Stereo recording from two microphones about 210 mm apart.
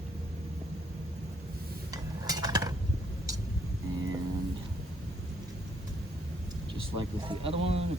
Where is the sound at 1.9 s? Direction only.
15° right (ahead or behind).